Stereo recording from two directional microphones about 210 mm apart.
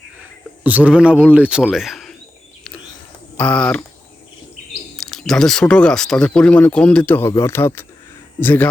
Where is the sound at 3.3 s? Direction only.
5° left (ahead or behind).